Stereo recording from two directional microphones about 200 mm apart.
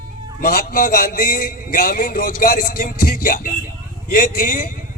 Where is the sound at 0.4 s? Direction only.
45° left (ahead or behind).